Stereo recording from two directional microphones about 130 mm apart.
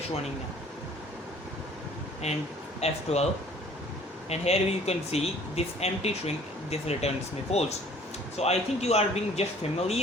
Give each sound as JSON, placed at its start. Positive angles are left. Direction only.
{"t": 2.2, "sound": "speech", "side_deg": 60}
{"t": 4.3, "sound": "speech", "side_deg": 55}